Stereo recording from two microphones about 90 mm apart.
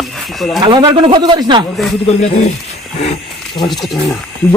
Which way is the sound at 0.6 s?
55° right (ahead or behind).